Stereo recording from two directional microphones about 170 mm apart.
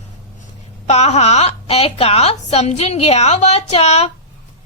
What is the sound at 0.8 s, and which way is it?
A woman's voice, 40° left (ahead or behind).